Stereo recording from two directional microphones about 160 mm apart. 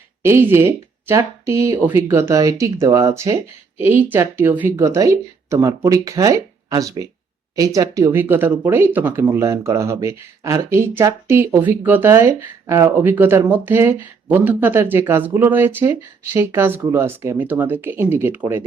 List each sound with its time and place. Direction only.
0.2 s speech: 15° right (ahead or behind)